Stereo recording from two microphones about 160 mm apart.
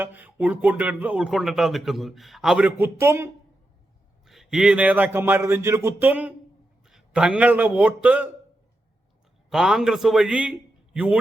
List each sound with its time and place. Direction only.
0.0 s speech: 10° right (ahead or behind)
4.3 s a man's voice: centre (ahead or behind)
9.5 s a man's voice: centre (ahead or behind)